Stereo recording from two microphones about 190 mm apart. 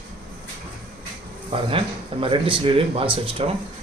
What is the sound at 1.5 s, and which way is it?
Speech, 30° right (ahead or behind).